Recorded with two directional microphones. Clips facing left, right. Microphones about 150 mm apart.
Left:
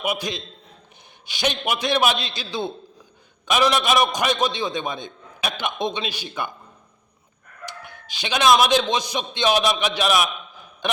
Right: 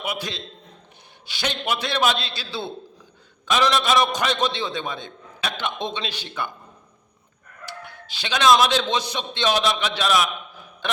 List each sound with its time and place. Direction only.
0.0 s a man's voice: 15° left (ahead or behind)
7.6 s a man's voice: 15° left (ahead or behind)